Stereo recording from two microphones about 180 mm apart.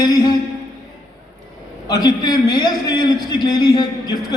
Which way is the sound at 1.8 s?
20° left (ahead or behind).